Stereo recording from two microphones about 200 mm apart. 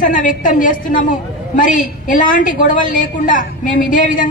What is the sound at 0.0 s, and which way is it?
A woman's voice, 40° left (ahead or behind).